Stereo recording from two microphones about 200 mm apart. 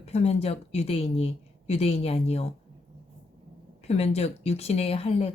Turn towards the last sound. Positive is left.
turn(degrees=30)  # may be behind; listen again after turning